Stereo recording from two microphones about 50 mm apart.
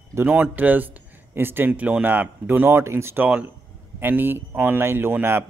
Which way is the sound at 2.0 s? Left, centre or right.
Right.